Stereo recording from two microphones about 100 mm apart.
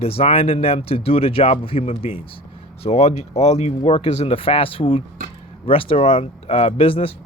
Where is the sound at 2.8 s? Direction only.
90° left.